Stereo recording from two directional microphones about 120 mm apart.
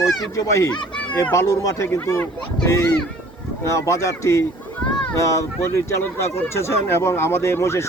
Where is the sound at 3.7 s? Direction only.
25° left (ahead or behind).